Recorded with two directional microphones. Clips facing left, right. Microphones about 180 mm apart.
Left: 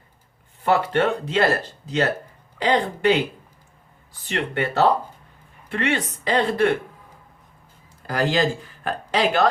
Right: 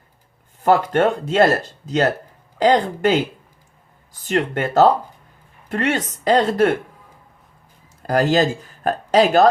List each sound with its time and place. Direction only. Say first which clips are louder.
0.6 s speech: right 4 dB; 45° right (ahead or behind)
4.3 s speech: right 5 dB; 45° right (ahead or behind)
8.0 s speech: right 5 dB; 45° right (ahead or behind)